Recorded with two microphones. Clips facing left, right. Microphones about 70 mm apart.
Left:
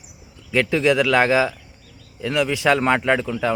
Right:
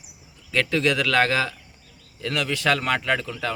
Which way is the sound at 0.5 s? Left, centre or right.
Centre.